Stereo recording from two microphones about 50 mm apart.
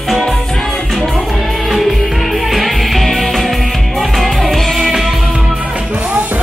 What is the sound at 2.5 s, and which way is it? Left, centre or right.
Music, centre.